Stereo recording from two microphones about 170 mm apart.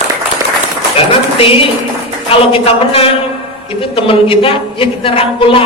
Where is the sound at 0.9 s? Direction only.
35° left (ahead or behind).